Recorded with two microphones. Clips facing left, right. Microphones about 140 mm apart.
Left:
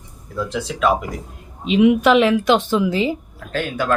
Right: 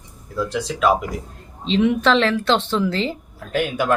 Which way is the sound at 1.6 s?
10° left (ahead or behind).